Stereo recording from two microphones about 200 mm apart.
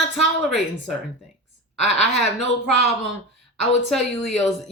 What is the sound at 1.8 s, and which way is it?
Speech, 35° left (ahead or behind).